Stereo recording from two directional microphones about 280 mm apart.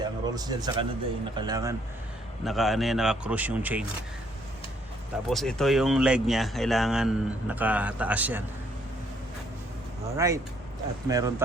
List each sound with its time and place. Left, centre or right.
0.0 s speech: centre
2.4 s speech: centre
5.3 s speech: centre
10.2 s speech: centre